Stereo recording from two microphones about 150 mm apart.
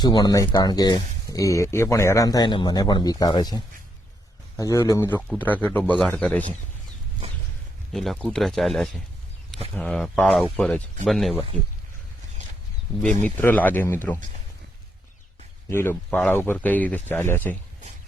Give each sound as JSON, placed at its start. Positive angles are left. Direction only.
{"t": 0.0, "sound": "speech", "side_deg": 30}
{"t": 7.9, "sound": "speech", "side_deg": 0}
{"t": 13.2, "sound": "speech", "side_deg": 10}
{"t": 15.7, "sound": "speech", "side_deg": 15}